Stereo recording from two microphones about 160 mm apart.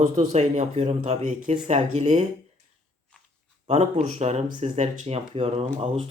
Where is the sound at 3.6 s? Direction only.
45° right (ahead or behind).